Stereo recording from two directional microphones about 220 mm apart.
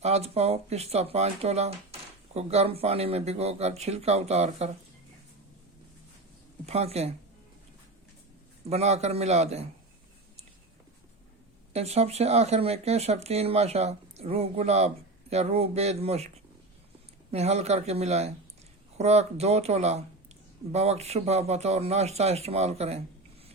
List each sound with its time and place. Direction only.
0.0 s speech: 30° right (ahead or behind)
6.7 s speech: 30° right (ahead or behind)
8.7 s speech: 30° right (ahead or behind)
11.7 s speech: 30° right (ahead or behind)
17.3 s speech: 30° right (ahead or behind)